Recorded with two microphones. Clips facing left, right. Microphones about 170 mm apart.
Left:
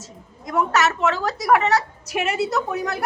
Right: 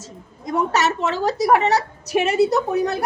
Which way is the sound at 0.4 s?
30° right (ahead or behind).